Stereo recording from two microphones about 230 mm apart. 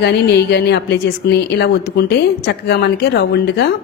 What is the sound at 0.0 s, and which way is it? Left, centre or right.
A woman's voice, left.